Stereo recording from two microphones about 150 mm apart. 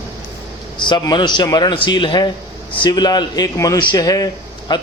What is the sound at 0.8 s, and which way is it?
A man's voice, 30° left (ahead or behind).